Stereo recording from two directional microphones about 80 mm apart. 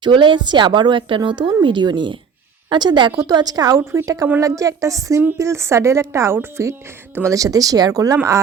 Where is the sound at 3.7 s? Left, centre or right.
Right.